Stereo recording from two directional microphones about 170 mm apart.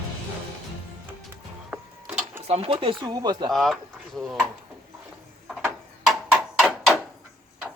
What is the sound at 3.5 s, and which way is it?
Speech, centre (ahead or behind).